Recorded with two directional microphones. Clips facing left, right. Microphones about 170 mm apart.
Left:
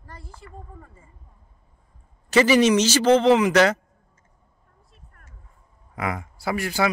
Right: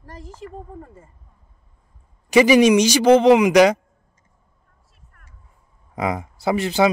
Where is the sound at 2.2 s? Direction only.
15° right (ahead or behind).